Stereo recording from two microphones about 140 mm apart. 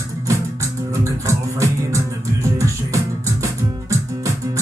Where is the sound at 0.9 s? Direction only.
20° right (ahead or behind).